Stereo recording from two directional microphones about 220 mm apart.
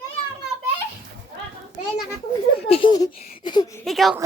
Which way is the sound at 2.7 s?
25° left (ahead or behind).